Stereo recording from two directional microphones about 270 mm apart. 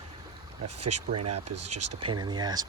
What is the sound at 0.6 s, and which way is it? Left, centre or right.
Speech, right.